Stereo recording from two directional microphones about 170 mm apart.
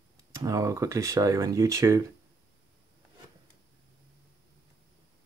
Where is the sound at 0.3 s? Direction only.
20° right (ahead or behind).